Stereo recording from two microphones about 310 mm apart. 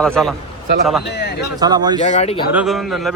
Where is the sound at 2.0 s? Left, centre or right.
Left.